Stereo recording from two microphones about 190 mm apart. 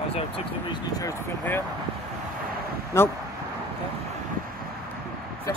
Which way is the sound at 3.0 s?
15° left (ahead or behind).